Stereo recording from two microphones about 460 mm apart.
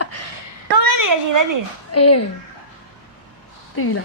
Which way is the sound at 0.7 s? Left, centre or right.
Right.